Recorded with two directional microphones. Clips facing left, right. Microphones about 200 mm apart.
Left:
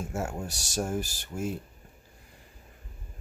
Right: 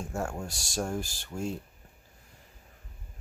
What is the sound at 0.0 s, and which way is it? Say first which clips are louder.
Speech: left 1 dB; 5° left (ahead or behind).